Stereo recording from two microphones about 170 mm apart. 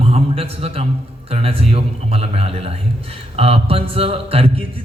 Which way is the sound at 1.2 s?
35° right (ahead or behind).